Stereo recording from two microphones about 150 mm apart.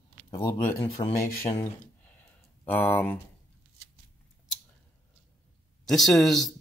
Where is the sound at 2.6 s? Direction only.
10° left (ahead or behind).